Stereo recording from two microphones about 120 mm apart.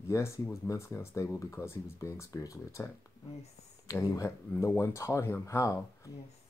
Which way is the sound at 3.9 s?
25° left (ahead or behind).